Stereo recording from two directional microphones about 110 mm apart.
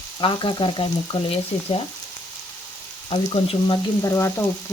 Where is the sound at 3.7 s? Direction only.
30° left (ahead or behind).